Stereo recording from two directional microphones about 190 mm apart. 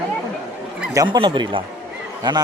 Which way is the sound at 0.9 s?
20° right (ahead or behind).